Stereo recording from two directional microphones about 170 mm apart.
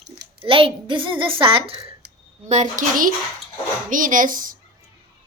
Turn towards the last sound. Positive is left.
turn(degrees=-55)  # may be behind; listen again after turning